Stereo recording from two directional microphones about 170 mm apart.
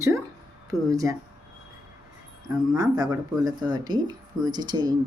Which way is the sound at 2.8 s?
20° right (ahead or behind).